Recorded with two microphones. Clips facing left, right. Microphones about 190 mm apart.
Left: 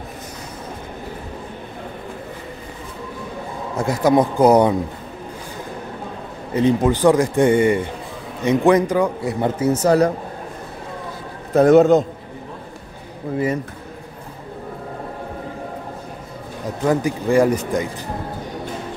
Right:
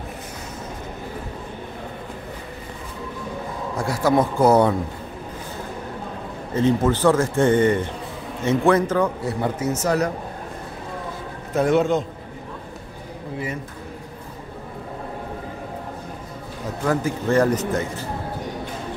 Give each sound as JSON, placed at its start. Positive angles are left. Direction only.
{"t": 3.7, "sound": "a man's voice", "side_deg": 20}
{"t": 6.5, "sound": "a man's voice", "side_deg": 15}
{"t": 9.6, "sound": "speech", "side_deg": 30}
{"t": 11.5, "sound": "speech", "side_deg": 40}
{"t": 16.8, "sound": "a man's voice", "side_deg": 15}